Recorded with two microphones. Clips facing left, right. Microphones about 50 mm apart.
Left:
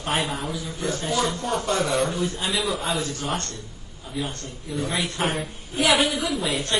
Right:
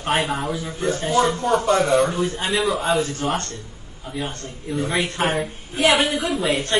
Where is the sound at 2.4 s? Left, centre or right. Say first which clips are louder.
Right 7 dB; centre.